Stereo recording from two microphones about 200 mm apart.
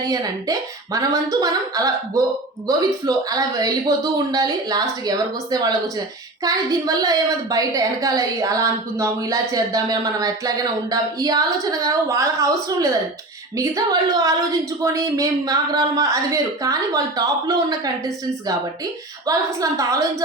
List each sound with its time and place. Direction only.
0.9 s a woman's voice: 15° right (ahead or behind)